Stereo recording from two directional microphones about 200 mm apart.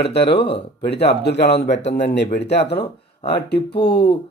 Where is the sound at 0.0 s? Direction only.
55° left (ahead or behind).